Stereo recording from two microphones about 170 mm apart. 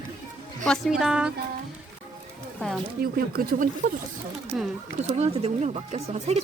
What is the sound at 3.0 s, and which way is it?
Speech, 60° right (ahead or behind).